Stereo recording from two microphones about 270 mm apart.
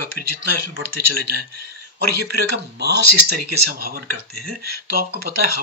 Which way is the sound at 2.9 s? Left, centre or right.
Right.